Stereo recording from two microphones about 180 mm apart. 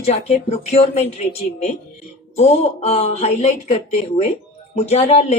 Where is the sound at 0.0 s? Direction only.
35° left (ahead or behind).